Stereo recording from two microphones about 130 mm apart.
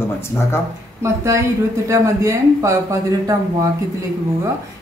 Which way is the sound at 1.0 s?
25° right (ahead or behind).